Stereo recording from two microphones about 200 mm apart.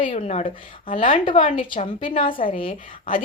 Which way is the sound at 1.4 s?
25° left (ahead or behind).